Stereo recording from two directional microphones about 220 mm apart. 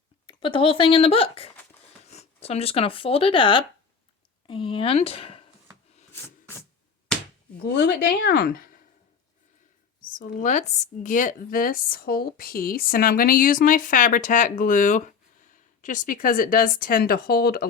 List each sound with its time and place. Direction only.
0.3 s speech: 25° left (ahead or behind)
7.6 s speech: 50° left (ahead or behind)
10.0 s speech: 35° left (ahead or behind)